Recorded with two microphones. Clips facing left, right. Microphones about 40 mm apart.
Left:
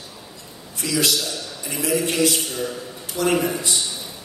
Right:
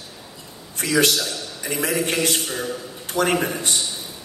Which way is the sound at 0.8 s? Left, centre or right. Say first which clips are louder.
Right 3 dB; right.